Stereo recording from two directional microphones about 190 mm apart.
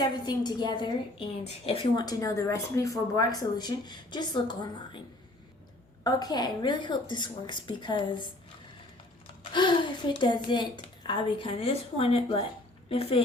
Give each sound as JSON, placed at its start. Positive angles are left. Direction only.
{"t": 0.3, "sound": "speech", "side_deg": 25}
{"t": 6.0, "sound": "speech", "side_deg": 20}
{"t": 9.5, "sound": "a woman's voice", "side_deg": 25}